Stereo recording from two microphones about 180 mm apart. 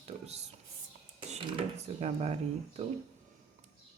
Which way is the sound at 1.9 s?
35° right (ahead or behind).